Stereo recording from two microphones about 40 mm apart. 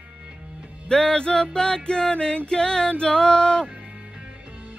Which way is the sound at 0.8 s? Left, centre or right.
Centre.